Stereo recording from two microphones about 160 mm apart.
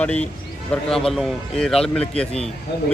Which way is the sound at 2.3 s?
40° left (ahead or behind).